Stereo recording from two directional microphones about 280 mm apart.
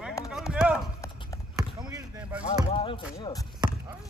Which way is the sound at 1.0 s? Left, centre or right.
Centre.